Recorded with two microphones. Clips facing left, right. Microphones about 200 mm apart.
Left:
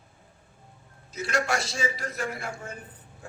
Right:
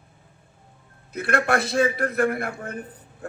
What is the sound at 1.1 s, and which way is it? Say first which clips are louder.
A man's voice: right 5 dB; 55° right (ahead or behind).